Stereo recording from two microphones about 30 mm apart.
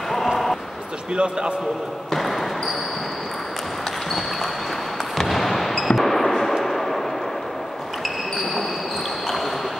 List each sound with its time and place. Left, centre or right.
1.1 s a man's voice: right
2.0 s basketball bounce: centre
5.1 s artillery fire: centre
5.9 s a sound: centre